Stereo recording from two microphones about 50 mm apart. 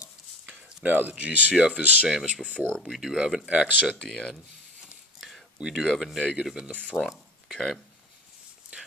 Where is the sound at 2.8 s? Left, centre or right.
Centre.